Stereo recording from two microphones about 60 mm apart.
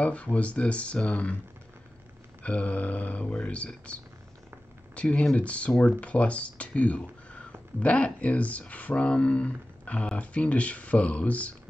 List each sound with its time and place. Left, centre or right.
0.0 s speech: left
2.4 s speech: left